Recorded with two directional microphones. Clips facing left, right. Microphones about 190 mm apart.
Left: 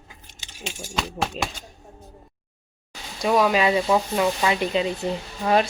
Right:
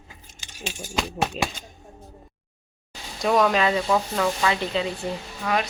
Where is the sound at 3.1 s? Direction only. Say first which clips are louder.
Left 1 dB; 5° left (ahead or behind).